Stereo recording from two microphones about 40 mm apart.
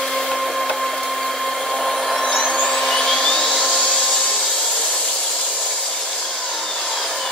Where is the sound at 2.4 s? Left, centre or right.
Centre.